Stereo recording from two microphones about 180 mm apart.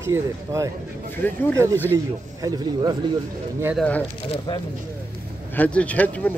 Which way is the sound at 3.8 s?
10° left (ahead or behind).